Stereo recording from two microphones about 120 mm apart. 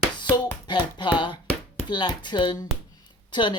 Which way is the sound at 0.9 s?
40° left (ahead or behind).